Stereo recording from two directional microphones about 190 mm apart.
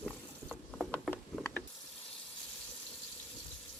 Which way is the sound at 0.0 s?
5° left (ahead or behind).